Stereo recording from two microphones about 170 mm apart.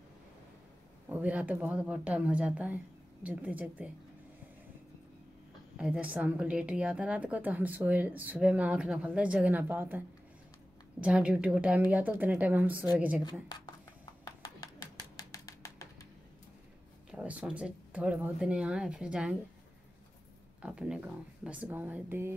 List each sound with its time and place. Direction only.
1.0 s a woman's voice: 10° right (ahead or behind)
5.8 s a woman's voice: 10° right (ahead or behind)
13.2 s speech: 25° left (ahead or behind)
14.2 s a sound: 20° left (ahead or behind)
17.1 s a woman's voice: 10° right (ahead or behind)
20.6 s a woman's voice: 5° right (ahead or behind)